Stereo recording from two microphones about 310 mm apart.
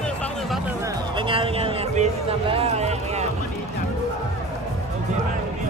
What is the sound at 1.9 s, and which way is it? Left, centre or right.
Speech, centre.